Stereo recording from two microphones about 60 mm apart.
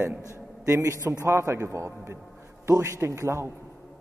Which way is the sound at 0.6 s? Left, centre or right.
Right.